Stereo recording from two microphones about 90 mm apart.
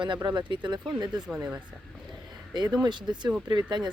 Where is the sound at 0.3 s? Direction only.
60° right (ahead or behind).